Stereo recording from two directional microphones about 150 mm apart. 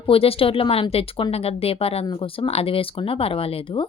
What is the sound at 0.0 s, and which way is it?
Speech, 40° left (ahead or behind).